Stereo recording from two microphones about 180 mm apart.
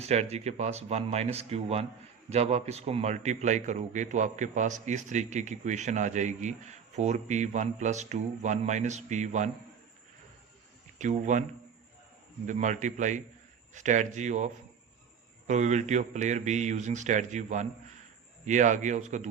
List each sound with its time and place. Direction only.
0.0 s a man's voice: 35° right (ahead or behind)
10.9 s a man's voice: 40° right (ahead or behind)
12.5 s a man's voice: 45° right (ahead or behind)